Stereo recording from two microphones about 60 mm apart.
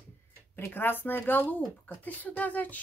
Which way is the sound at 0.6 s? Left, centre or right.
Left.